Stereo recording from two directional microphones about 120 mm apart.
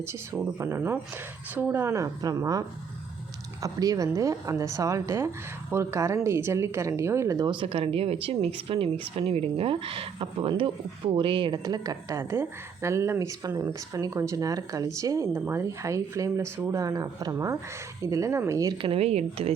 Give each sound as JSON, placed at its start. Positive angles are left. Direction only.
{"t": 0.6, "sound": "a woman's voice", "side_deg": -20}
{"t": 7.4, "sound": "a woman's voice", "side_deg": -45}
{"t": 18.8, "sound": "speech", "side_deg": -55}